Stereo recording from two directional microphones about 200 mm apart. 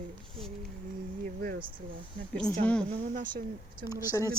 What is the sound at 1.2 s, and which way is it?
Speech, 45° right (ahead or behind).